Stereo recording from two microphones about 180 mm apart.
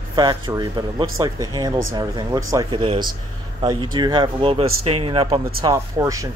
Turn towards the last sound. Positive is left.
turn(degrees=-20)  # may be behind; listen again after turning